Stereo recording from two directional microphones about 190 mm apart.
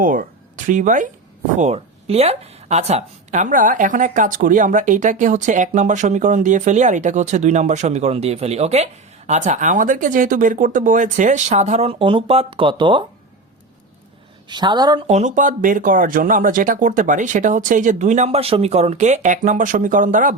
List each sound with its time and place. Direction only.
0.0 s speech: 45° right (ahead or behind); by 13.1 s 25° right (ahead or behind)
14.5 s speech: 20° right (ahead or behind); by 20.3 s 45° right (ahead or behind)